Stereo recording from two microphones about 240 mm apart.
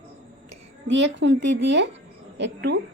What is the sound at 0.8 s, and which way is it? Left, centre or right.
A woman's voice, right.